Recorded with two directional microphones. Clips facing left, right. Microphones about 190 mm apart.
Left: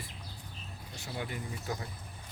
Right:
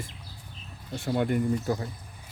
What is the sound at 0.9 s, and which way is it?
Speech, 55° right (ahead or behind).